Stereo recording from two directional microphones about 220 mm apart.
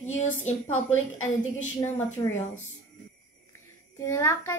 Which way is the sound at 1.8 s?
15° left (ahead or behind).